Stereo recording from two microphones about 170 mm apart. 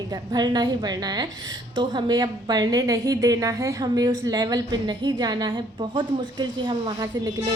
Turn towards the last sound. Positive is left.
turn(degrees=-20)  # may be behind; listen again after turning